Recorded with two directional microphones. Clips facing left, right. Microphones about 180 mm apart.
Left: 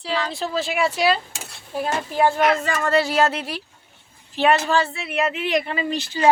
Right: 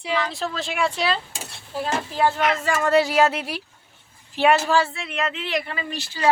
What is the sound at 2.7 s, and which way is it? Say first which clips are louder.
Speech: right 1 dB; 15° right (ahead or behind).